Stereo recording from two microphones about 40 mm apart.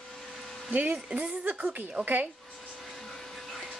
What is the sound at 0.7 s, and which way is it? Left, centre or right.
Speech, right.